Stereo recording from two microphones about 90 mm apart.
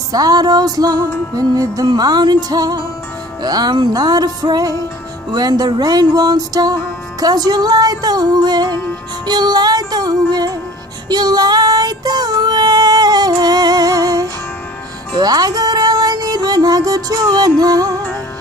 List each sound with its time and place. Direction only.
0.1 s music: 45° right (ahead or behind)